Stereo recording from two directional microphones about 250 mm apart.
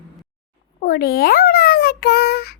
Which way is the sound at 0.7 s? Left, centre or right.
Left.